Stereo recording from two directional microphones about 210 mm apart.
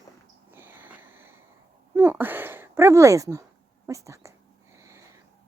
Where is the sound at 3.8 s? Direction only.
15° right (ahead or behind).